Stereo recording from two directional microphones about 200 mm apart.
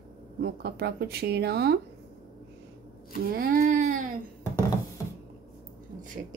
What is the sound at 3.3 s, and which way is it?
Speech, 45° right (ahead or behind).